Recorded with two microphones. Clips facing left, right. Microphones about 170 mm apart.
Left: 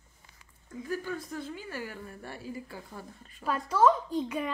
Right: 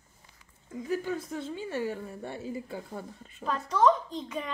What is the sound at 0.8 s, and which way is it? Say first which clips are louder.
A woman's voice: right 3 dB; 20° right (ahead or behind).